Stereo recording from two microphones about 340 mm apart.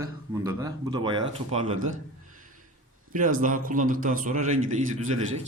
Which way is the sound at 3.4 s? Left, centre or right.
Right.